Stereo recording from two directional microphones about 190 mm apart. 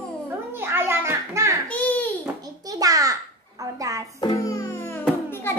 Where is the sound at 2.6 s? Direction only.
20° right (ahead or behind).